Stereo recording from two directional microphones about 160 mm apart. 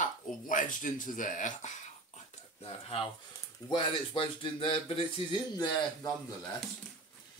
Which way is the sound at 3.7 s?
30° left (ahead or behind).